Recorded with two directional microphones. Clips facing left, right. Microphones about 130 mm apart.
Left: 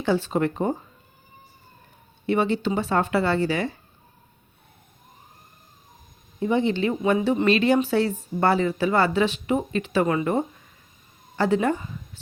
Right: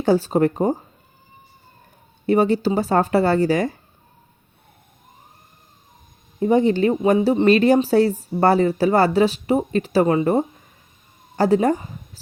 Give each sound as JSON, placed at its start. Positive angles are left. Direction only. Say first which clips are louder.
{"t": 0.0, "sound": "speech", "louder": "right 5 dB", "side_deg": -40}
{"t": 2.2, "sound": "speech", "louder": "right 5 dB", "side_deg": -40}
{"t": 6.4, "sound": "speech", "louder": "right 6 dB", "side_deg": -40}